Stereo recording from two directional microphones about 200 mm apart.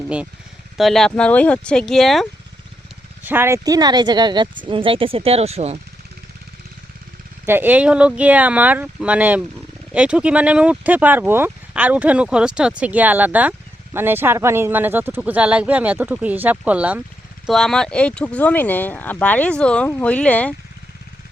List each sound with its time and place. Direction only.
0.8 s speech: centre (ahead or behind)
3.2 s speech: 10° right (ahead or behind); by 5.8 s 30° right (ahead or behind)
7.4 s speech: 10° right (ahead or behind); by 20.5 s 5° left (ahead or behind)